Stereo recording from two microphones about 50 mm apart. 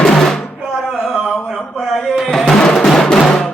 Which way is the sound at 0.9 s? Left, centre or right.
Centre.